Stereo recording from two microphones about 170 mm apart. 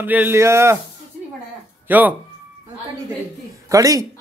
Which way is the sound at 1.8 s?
10° right (ahead or behind).